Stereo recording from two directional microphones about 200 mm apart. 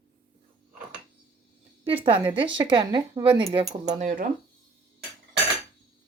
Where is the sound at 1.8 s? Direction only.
25° right (ahead or behind).